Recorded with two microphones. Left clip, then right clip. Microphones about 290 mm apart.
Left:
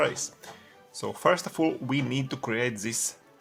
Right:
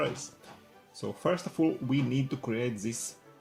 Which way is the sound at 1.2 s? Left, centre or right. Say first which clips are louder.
Left 5 dB; left.